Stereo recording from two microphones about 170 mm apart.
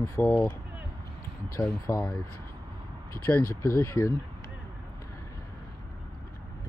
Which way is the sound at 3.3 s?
15° left (ahead or behind).